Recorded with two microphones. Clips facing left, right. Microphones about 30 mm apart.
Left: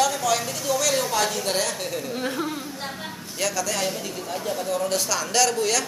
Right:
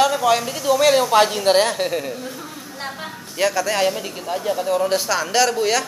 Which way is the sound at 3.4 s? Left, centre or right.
Right.